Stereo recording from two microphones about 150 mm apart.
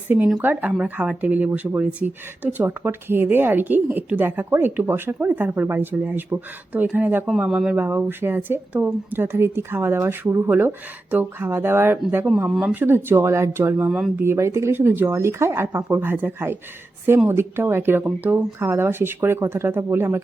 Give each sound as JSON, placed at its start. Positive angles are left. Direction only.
{"t": 0.1, "sound": "speech", "side_deg": -10}